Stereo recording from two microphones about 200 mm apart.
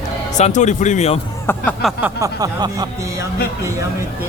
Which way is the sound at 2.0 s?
15° right (ahead or behind).